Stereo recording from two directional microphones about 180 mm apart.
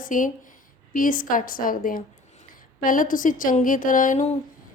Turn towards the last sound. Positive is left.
turn(degrees=45)  # may be behind; listen again after turning